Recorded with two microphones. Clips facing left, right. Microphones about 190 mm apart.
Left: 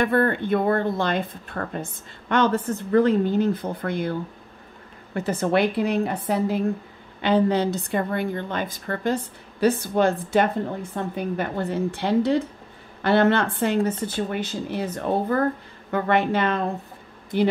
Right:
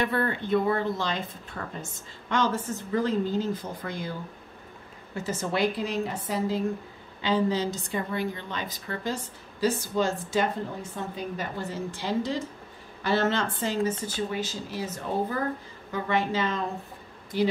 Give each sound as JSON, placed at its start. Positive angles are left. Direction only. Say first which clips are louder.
{"t": 0.0, "sound": "a woman's voice", "louder": "left 6 dB", "side_deg": 50}